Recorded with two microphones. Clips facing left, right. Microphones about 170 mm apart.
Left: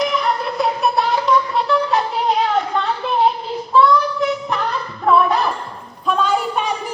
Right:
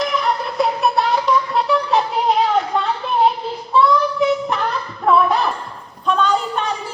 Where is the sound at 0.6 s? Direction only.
Centre (ahead or behind).